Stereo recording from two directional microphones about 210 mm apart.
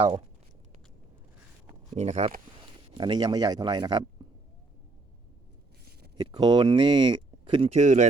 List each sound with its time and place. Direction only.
0.0 s speech: 20° right (ahead or behind)
1.9 s speech: 30° right (ahead or behind)
3.0 s speech: 20° right (ahead or behind)
6.3 s speech: 20° right (ahead or behind)